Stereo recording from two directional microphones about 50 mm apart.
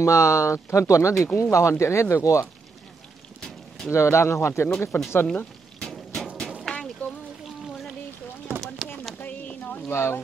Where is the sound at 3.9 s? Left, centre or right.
Left.